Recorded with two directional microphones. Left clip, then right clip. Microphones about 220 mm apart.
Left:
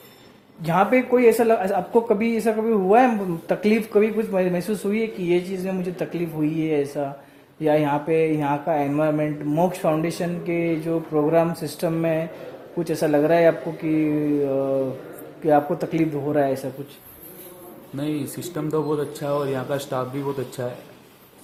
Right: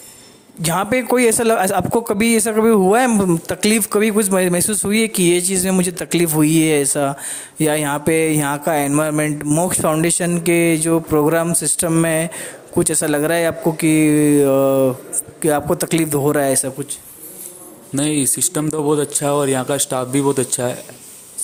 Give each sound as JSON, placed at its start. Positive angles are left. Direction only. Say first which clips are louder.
{"t": 0.6, "sound": "speech", "louder": "right 1 dB", "side_deg": -40}
{"t": 17.9, "sound": "speech", "louder": "right 8 dB", "side_deg": -45}